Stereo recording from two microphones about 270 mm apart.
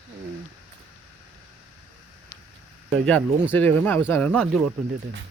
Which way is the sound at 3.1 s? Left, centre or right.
Centre.